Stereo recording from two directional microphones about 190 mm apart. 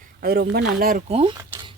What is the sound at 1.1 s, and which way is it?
Speech, 30° right (ahead or behind).